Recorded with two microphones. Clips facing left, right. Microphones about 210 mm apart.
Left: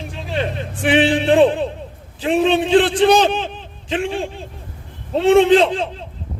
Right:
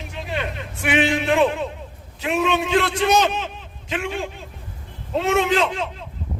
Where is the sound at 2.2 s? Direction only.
30° left (ahead or behind).